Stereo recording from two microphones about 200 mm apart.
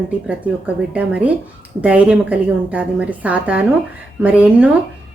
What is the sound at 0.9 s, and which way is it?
A woman's voice, 10° right (ahead or behind).